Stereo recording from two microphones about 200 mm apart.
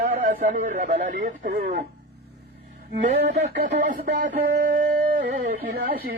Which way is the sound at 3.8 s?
45° right (ahead or behind).